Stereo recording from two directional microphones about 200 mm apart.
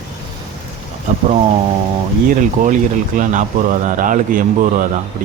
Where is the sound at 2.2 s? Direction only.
40° right (ahead or behind).